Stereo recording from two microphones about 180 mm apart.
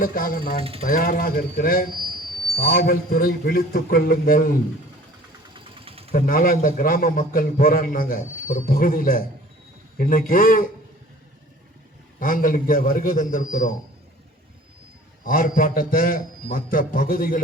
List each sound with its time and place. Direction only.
0.0 s a man's voice: 50° left (ahead or behind)
5.5 s mechanisms: 30° right (ahead or behind)
6.1 s a man's voice: 50° left (ahead or behind)
12.2 s a man's voice: 50° left (ahead or behind)
15.2 s a man's voice: 50° left (ahead or behind)